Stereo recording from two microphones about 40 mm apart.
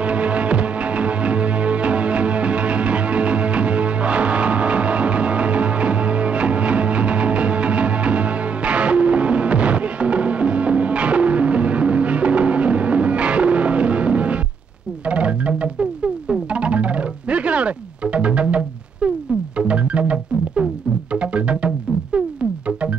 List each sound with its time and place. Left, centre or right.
0.0 s music: right